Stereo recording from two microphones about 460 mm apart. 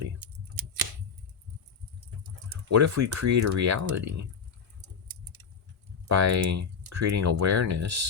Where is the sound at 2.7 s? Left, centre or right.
Right.